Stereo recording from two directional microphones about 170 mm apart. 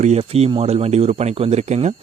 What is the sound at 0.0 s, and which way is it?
Speech, 40° right (ahead or behind).